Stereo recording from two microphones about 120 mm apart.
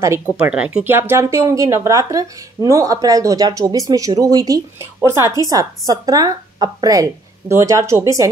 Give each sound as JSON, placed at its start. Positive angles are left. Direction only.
{"t": 0.4, "sound": "speech", "side_deg": -10}